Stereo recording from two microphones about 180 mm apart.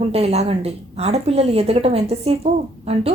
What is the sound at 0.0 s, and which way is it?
A woman's voice, 35° right (ahead or behind).